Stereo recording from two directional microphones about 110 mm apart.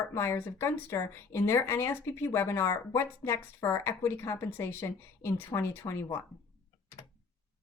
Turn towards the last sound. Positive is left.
turn(degrees=25)  # may be behind; listen again after turning